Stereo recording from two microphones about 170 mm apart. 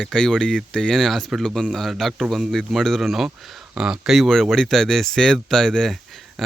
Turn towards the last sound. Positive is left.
turn(degrees=0)  # may be behind; listen again after turning